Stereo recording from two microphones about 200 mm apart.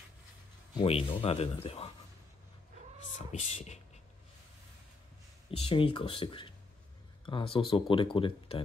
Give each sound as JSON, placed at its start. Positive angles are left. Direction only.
{"t": 0.7, "sound": "speech", "side_deg": 25}
{"t": 3.2, "sound": "speech", "side_deg": 35}
{"t": 5.6, "sound": "speech", "side_deg": 25}